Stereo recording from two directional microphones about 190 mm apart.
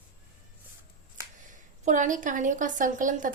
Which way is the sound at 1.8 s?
40° right (ahead or behind).